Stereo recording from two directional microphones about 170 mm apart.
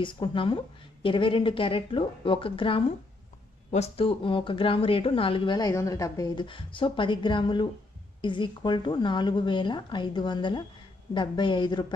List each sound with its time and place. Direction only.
0.0 s a woman's voice: 30° left (ahead or behind)